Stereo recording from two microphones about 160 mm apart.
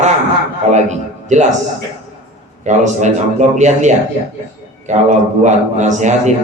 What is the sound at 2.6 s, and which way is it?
A man's voice, 50° right (ahead or behind).